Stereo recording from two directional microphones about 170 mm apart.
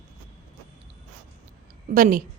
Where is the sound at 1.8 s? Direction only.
55° right (ahead or behind).